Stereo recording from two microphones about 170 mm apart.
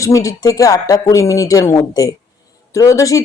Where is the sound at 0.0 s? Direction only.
20° left (ahead or behind).